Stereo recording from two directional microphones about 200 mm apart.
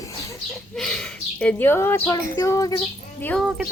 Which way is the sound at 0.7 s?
5° left (ahead or behind).